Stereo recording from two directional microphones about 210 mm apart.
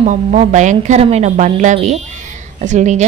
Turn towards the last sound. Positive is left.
turn(degrees=-35)  # may be behind; listen again after turning